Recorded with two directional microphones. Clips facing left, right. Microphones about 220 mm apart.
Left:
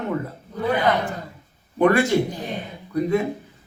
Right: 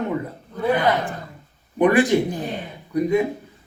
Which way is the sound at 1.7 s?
15° right (ahead or behind).